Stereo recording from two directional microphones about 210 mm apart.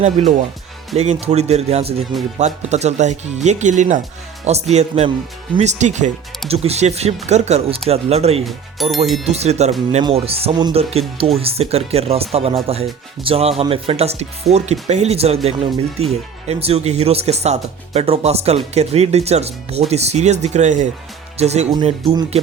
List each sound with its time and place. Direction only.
0.0 s speech: 35° right (ahead or behind)
8.4 s speech: centre (ahead or behind)
9.2 s speech: 30° right (ahead or behind)